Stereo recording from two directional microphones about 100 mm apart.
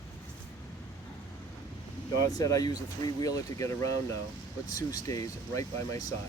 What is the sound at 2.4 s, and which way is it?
Speech, 35° left (ahead or behind).